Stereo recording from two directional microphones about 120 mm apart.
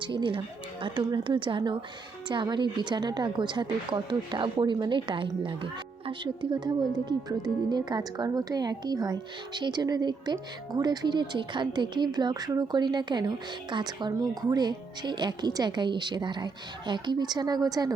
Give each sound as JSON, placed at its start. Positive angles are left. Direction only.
{"t": 0.0, "sound": "a woman's voice", "side_deg": -45}